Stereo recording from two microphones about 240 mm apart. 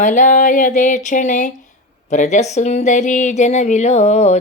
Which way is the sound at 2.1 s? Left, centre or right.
Left.